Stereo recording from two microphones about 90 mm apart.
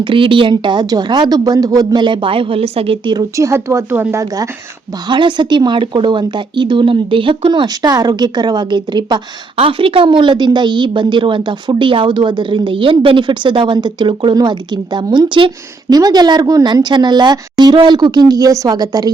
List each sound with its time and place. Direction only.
0.0 s speech: 70° right (ahead or behind)
0.5 s a woman's voice: 55° right (ahead or behind); by 3.0 s 90° right
3.3 s speech: 35° right (ahead or behind)
5.0 s a woman's voice: 60° right (ahead or behind)
9.6 s a woman's voice: 90° right; by 15.5 s 65° right (ahead or behind)
15.9 s speech: 45° right (ahead or behind)
16.9 s speech: 55° right (ahead or behind)